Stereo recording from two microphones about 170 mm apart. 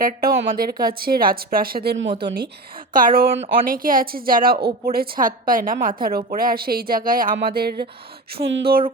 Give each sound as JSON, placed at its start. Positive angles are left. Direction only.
{"t": 0.0, "sound": "a woman's voice", "side_deg": -60}
{"t": 2.9, "sound": "a woman's voice", "side_deg": -55}
{"t": 3.3, "sound": "speech", "side_deg": -40}
{"t": 3.7, "sound": "a woman's voice", "side_deg": -55}